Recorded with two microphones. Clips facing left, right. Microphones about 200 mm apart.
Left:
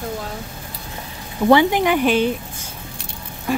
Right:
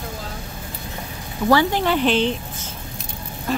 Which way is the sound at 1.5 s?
15° left (ahead or behind).